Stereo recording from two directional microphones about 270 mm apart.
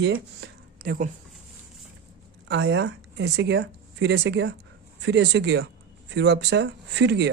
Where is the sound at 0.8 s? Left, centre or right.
Right.